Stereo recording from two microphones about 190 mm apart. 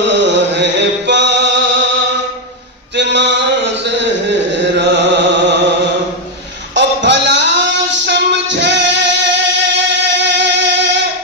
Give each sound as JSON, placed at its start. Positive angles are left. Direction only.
{"t": 0.6, "sound": "music", "side_deg": -65}
{"t": 3.0, "sound": "mantra", "side_deg": -65}
{"t": 4.7, "sound": "mantra", "side_deg": -65}
{"t": 6.7, "sound": "music", "side_deg": -70}